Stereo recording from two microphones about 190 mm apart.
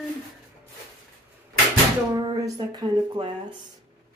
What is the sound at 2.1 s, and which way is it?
Speech, 20° right (ahead or behind).